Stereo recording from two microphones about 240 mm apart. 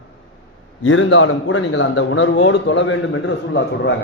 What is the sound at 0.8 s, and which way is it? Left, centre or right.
A man's voice, left.